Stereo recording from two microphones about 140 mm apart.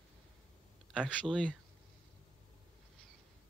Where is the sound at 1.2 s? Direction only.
5° left (ahead or behind).